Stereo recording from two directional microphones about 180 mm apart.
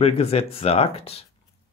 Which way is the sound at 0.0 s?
35° left (ahead or behind).